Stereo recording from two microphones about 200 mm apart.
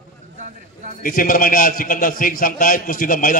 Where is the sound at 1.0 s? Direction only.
45° left (ahead or behind).